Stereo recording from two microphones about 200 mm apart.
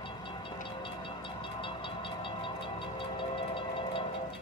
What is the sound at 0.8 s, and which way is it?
Train, 25° left (ahead or behind).